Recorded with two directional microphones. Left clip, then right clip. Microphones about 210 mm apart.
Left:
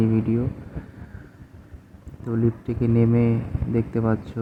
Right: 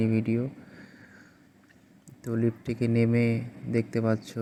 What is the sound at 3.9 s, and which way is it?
Speech, 35° right (ahead or behind).